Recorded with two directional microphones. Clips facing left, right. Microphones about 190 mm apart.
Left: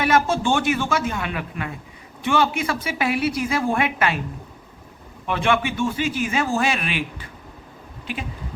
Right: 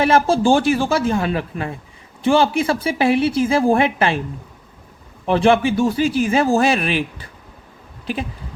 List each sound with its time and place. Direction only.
0.0 s a man's voice: 30° right (ahead or behind)
5.2 s a man's voice: 35° right (ahead or behind)